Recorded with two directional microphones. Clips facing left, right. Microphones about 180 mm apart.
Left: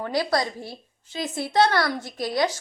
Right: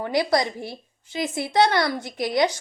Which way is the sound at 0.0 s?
15° right (ahead or behind).